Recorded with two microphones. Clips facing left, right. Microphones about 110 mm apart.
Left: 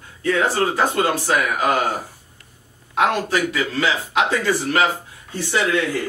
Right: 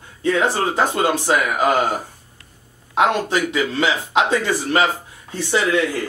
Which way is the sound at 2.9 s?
20° right (ahead or behind).